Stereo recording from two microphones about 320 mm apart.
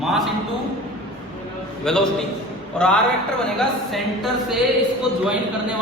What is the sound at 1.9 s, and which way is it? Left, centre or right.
A man's voice, centre.